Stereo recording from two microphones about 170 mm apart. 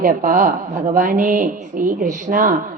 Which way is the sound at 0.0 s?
55° right (ahead or behind).